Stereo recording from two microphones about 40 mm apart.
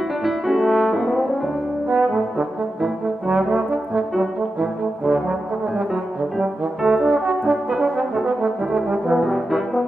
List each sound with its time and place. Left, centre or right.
0.2 s french horn: centre
0.9 s brass instrument: centre
1.9 s brass instrument: right
3.3 s brass instrument: right
6.4 s brass instrument: centre
8.9 s brass instrument: right
9.2 s brass instrument: centre